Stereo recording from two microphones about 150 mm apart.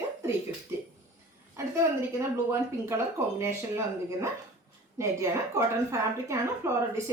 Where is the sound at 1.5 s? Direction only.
15° right (ahead or behind).